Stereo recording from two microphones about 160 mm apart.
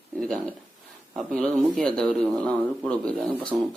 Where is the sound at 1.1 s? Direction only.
5° left (ahead or behind).